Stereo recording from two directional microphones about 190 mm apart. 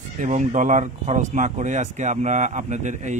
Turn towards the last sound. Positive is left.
turn(degrees=-40)  # may be behind; listen again after turning